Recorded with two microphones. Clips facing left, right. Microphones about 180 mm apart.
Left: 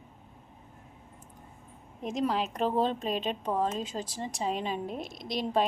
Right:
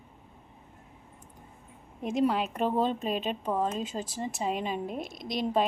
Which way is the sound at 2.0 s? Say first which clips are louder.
Right 3 dB; 5° right (ahead or behind).